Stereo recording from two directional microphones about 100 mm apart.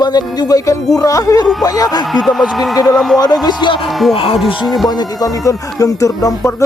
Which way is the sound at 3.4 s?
50° left (ahead or behind).